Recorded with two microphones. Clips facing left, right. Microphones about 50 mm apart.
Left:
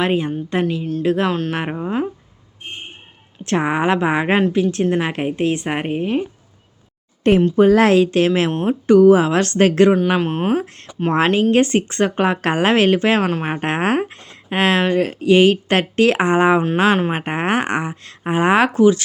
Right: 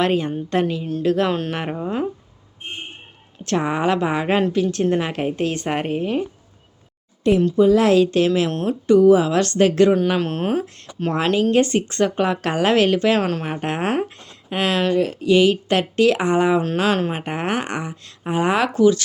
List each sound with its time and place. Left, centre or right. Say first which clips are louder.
0.0 s a woman's voice: left 1 dB; centre
1.0 s a woman's voice: left 1 dB; left
1.3 s speech: left 1 dB; centre
1.5 s a woman's voice: left 2 dB; centre
3.4 s a woman's voice: left 2 dB; left
4.9 s a woman's voice: left 1 dB; centre
7.5 s a woman's voice: left 1 dB; left
10.1 s a woman's voice: left 3 dB; centre
11.1 s a woman's voice: left 3 dB; left
16.6 s a woman's voice: left 4 dB; left